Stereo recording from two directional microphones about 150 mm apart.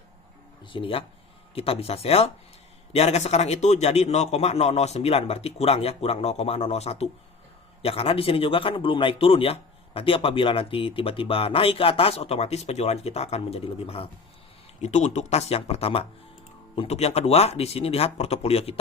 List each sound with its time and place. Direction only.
0.6 s a man's voice: 35° left (ahead or behind)